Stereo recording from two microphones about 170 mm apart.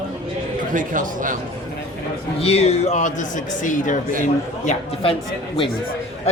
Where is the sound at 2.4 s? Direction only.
40° left (ahead or behind).